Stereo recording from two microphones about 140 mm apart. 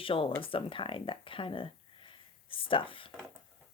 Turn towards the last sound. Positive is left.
turn(degrees=40)  # may be behind; listen again after turning